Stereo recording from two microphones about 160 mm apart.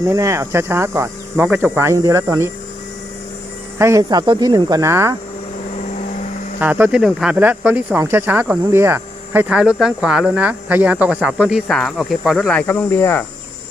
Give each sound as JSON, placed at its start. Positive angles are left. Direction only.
{"t": 0.0, "sound": "speech", "side_deg": -20}
{"t": 3.8, "sound": "speech", "side_deg": -20}
{"t": 6.6, "sound": "speech", "side_deg": -10}